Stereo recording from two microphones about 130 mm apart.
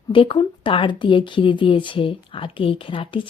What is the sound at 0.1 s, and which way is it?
Speech, 40° left (ahead or behind).